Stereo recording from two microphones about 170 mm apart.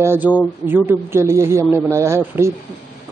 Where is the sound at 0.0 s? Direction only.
15° right (ahead or behind).